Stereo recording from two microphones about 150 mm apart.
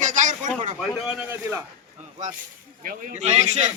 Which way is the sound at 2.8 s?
65° right (ahead or behind).